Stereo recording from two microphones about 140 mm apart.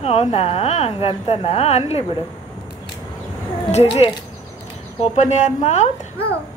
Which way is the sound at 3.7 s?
50° left (ahead or behind).